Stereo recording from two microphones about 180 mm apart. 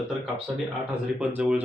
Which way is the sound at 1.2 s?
5° right (ahead or behind).